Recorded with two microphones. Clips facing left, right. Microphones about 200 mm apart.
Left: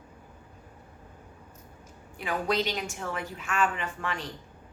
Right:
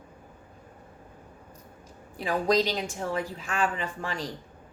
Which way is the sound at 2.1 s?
35° right (ahead or behind).